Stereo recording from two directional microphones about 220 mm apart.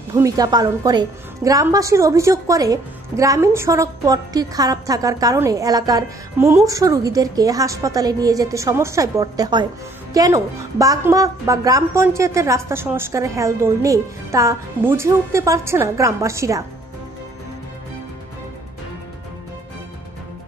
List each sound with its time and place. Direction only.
0.1 s a woman's voice: 15° right (ahead or behind)